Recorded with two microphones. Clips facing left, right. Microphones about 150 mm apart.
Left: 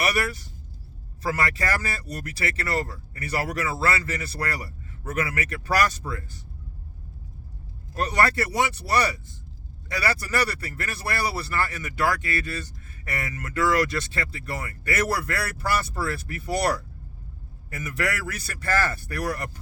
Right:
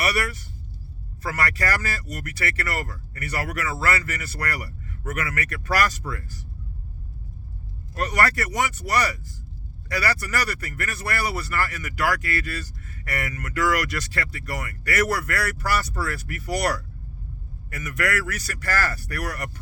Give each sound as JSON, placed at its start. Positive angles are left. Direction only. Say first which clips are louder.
{"t": 0.2, "sound": "speech", "louder": "left 1 dB", "side_deg": 30}
{"t": 7.9, "sound": "speech", "louder": "even", "side_deg": 25}